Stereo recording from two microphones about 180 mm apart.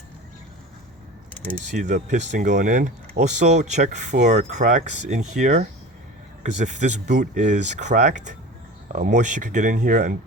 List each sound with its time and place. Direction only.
1.7 s speech: 45° right (ahead or behind)